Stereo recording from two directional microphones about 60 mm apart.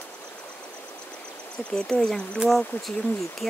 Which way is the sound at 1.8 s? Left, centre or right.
Centre.